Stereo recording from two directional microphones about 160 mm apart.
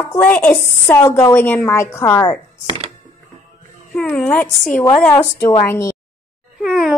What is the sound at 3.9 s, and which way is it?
Speech, 5° left (ahead or behind).